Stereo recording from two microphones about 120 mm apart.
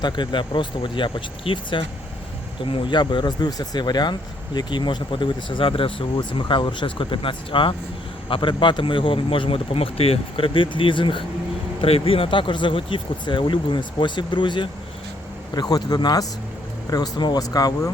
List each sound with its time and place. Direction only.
0.0 s speech: 40° left (ahead or behind)